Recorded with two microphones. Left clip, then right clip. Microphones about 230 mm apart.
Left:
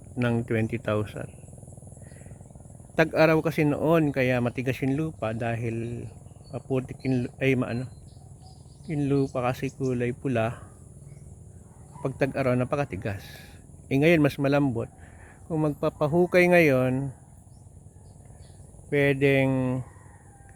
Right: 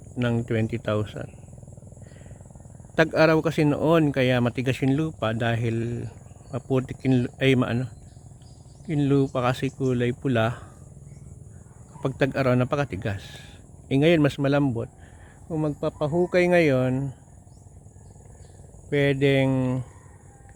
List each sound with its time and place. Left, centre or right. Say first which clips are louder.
0.2 s speech: right 1 dB; centre
2.9 s speech: right 2 dB; centre
8.9 s speech: right 3 dB; centre
12.0 s speech: right 3 dB; centre
18.9 s speech: right 1 dB; centre